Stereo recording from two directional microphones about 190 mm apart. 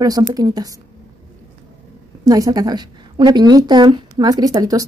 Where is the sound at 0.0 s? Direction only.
20° right (ahead or behind).